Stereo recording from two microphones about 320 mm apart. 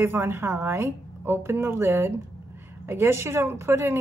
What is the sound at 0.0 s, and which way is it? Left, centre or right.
A woman's voice, centre.